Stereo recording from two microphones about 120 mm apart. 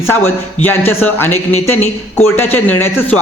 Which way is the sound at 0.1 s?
15° left (ahead or behind).